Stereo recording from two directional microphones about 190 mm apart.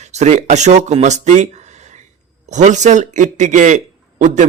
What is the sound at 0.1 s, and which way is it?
A man's voice, 35° right (ahead or behind).